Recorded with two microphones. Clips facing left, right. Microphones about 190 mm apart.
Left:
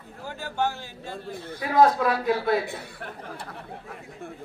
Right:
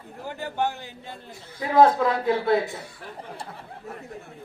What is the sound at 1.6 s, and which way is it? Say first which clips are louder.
Speech: right 2 dB; 25° right (ahead or behind).